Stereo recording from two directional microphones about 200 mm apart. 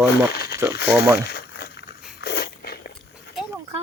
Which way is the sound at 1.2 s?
55° left (ahead or behind).